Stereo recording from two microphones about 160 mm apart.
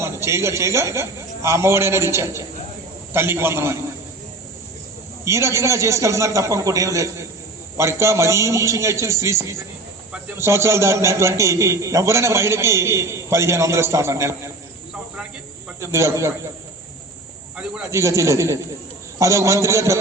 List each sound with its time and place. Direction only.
0.0 s a man's voice: 15° right (ahead or behind)
5.2 s a man's voice: 15° right (ahead or behind)
15.8 s a man's voice: 15° right (ahead or behind)
17.9 s a man's voice: 20° right (ahead or behind)